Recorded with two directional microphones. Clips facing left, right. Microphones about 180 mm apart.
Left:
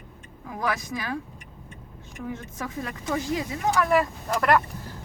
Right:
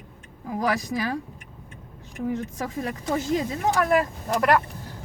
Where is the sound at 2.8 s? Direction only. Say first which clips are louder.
Right 2 dB; 30° right (ahead or behind).